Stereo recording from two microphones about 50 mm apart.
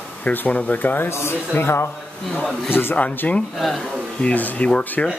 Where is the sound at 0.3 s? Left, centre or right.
Left.